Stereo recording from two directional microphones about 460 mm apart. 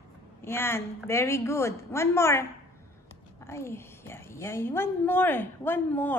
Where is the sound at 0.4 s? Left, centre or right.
Centre.